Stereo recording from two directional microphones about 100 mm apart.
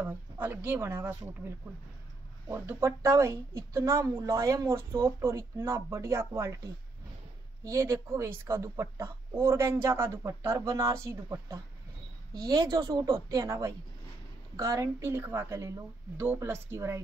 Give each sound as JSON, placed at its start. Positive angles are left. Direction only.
{"t": 0.0, "sound": "speech", "side_deg": -20}
{"t": 2.4, "sound": "speech", "side_deg": -25}
{"t": 12.4, "sound": "a woman's voice", "side_deg": -40}
{"t": 13.0, "sound": "speech", "side_deg": -35}